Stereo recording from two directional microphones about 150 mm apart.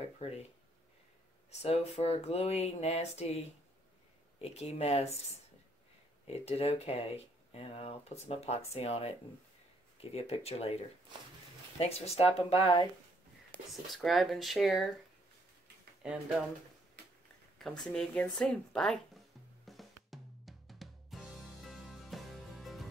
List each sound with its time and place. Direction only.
1.5 s speech: 45° left (ahead or behind)
6.2 s speech: 45° left (ahead or behind)
10.1 s speech: 45° left (ahead or behind)
11.8 s speech: 45° left (ahead or behind)
13.5 s a sound: 10° left (ahead or behind)
14.0 s speech: centre (ahead or behind)
16.0 s speech: 5° right (ahead or behind)
17.6 s speech: 5° left (ahead or behind)
19.6 s music: centre (ahead or behind)